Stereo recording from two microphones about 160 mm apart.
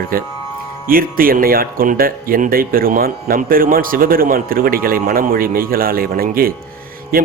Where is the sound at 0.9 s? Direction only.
65° right (ahead or behind).